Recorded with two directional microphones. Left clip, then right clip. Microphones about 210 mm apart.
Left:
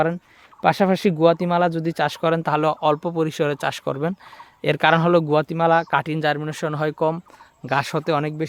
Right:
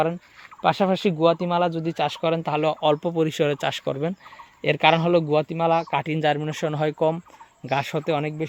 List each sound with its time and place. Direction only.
0.6 s speech: 30° left (ahead or behind)
2.8 s speech: centre (ahead or behind); by 6.0 s 20° left (ahead or behind)
6.0 s speech: centre (ahead or behind)
7.6 s speech: 15° left (ahead or behind)